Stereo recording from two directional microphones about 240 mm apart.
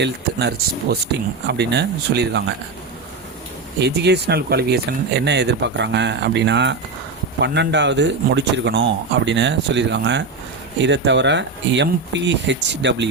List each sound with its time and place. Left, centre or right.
0.0 s speech: right
3.8 s speech: right